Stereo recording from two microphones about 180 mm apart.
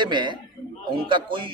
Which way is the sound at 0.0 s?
25° right (ahead or behind).